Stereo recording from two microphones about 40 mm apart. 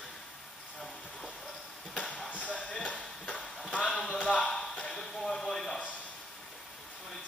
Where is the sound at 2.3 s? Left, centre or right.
Left.